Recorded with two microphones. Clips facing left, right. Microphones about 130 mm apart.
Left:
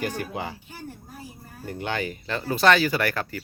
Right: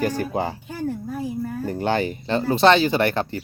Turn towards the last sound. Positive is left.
turn(degrees=-25)  # may be behind; listen again after turning